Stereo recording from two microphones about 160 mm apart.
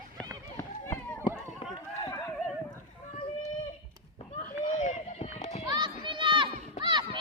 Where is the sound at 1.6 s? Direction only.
35° left (ahead or behind).